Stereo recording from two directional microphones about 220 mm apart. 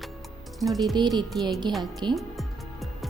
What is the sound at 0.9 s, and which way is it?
Speech, 20° right (ahead or behind).